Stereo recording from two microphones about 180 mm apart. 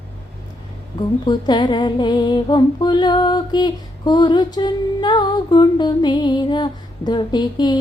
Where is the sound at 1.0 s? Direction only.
25° left (ahead or behind).